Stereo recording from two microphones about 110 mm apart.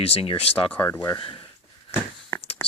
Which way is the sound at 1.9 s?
25° left (ahead or behind).